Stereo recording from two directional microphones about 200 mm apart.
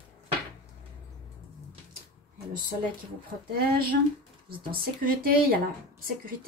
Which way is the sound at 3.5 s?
50° right (ahead or behind).